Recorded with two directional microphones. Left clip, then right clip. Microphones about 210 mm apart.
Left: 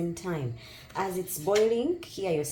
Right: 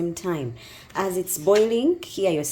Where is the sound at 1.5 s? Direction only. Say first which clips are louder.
Right 6 dB; 50° right (ahead or behind).